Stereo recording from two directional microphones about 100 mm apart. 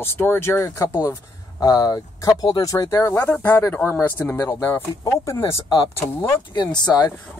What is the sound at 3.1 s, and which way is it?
Speech, 15° left (ahead or behind).